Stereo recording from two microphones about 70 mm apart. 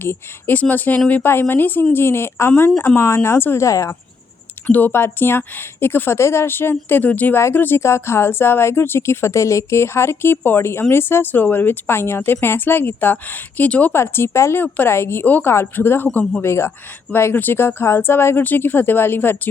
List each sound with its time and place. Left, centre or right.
0.0 s speech: left
0.6 s speech: left
3.7 s speech: left
4.6 s speech: left
13.9 s speech: left